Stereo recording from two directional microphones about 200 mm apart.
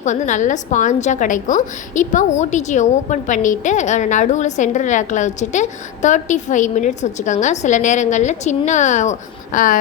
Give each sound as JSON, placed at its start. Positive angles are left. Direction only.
{"t": 0.0, "sound": "a woman's voice", "side_deg": 35}